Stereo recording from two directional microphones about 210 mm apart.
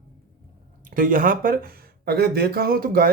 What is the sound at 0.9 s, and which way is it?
Speech, 40° right (ahead or behind).